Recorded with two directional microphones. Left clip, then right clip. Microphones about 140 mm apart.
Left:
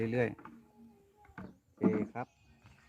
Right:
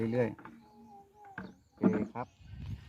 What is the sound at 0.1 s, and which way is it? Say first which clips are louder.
Speech: right 1 dB; 45° left (ahead or behind).